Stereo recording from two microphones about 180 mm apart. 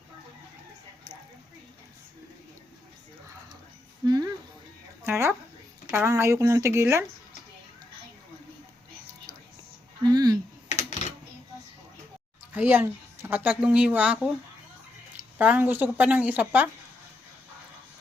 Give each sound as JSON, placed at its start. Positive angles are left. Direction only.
{"t": 4.0, "sound": "a sound", "side_deg": -20}
{"t": 5.0, "sound": "speech", "side_deg": -15}
{"t": 9.3, "sound": "music", "side_deg": -20}
{"t": 10.0, "sound": "a sound", "side_deg": -20}
{"t": 10.7, "sound": "typing", "side_deg": 40}
{"t": 12.5, "sound": "speech", "side_deg": -10}